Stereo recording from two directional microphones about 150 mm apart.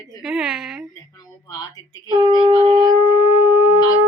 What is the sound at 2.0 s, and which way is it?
Speech, 30° right (ahead or behind).